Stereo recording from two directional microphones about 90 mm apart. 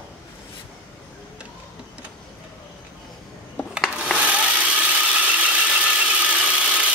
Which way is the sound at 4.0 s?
15° right (ahead or behind).